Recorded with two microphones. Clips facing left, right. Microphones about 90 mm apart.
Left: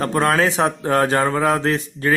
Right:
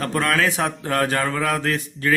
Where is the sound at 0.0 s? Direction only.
30° left (ahead or behind).